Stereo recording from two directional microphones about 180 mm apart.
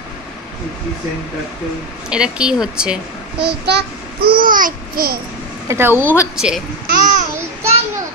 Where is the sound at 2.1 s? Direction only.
5° right (ahead or behind).